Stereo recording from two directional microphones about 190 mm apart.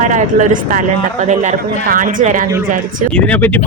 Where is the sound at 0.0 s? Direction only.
40° right (ahead or behind).